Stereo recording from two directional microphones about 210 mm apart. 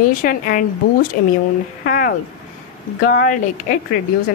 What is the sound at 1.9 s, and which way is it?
A woman's voice, 40° left (ahead or behind).